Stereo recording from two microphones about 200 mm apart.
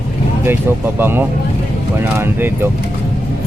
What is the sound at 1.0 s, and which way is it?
Speech, 10° right (ahead or behind).